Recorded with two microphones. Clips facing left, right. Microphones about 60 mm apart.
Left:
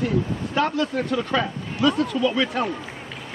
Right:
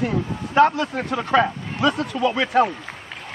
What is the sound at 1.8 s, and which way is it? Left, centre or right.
Speech, centre.